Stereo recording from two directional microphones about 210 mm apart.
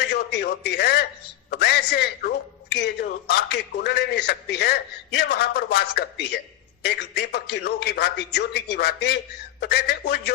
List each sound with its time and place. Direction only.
0.1 s a man's voice: 50° left (ahead or behind)